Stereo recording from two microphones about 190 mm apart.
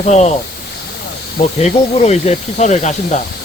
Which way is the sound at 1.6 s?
35° left (ahead or behind).